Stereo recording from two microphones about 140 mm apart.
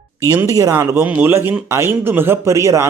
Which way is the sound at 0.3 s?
25° right (ahead or behind).